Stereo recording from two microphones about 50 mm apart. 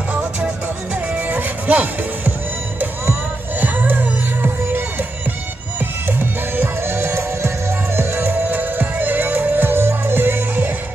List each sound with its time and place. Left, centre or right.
0.1 s music: right